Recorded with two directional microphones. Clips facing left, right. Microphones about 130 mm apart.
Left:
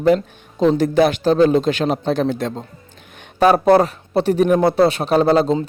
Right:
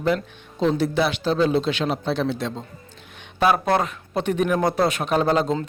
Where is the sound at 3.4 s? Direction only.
35° left (ahead or behind).